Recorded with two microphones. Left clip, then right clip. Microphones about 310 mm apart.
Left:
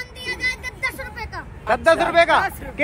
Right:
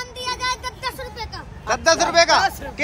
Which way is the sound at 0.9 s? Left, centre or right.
Centre.